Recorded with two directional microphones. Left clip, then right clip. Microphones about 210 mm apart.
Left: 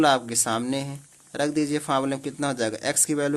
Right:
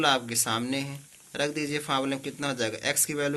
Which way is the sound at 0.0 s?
50° left (ahead or behind).